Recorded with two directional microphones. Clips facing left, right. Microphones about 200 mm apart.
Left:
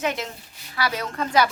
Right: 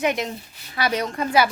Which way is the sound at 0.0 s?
15° right (ahead or behind).